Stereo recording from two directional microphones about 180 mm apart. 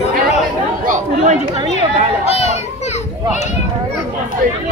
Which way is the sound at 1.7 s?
35° left (ahead or behind).